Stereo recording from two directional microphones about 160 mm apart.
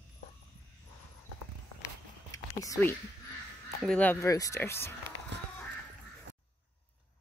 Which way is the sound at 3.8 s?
5° left (ahead or behind).